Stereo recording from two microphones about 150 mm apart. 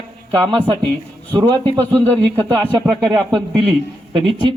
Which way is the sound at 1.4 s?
30° right (ahead or behind).